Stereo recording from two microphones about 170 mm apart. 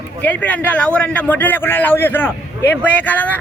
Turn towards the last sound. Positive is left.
turn(degrees=10)  # may be behind; listen again after turning